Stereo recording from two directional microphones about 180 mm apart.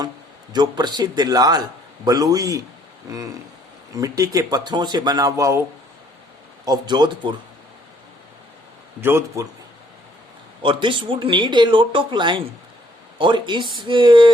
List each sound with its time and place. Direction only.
0.5 s speech: 25° right (ahead or behind)
6.7 s speech: 25° right (ahead or behind)
9.0 s speech: 15° right (ahead or behind)
10.6 s speech: 30° right (ahead or behind)